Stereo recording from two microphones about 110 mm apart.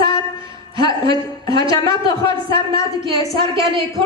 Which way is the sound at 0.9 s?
35° left (ahead or behind).